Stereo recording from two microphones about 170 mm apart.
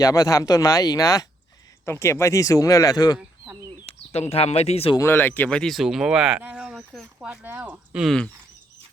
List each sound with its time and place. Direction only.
0.0 s speech: 20° left (ahead or behind)
3.2 s a sound: 10° right (ahead or behind)
3.8 s speech: 35° left (ahead or behind)
4.9 s speech: 15° left (ahead or behind)